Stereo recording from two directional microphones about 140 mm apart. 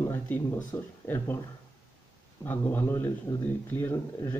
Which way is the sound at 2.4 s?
15° left (ahead or behind).